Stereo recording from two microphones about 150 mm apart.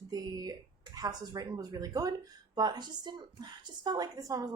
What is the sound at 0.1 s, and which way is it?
Speech, 25° right (ahead or behind).